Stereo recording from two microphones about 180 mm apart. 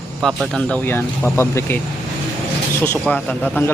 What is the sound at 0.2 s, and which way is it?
A man's voice, 5° left (ahead or behind).